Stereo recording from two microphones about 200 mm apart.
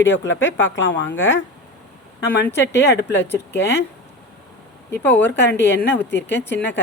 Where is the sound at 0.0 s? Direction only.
65° left (ahead or behind).